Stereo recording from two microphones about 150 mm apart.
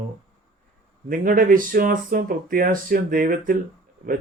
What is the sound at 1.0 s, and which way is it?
Speech, 65° right (ahead or behind).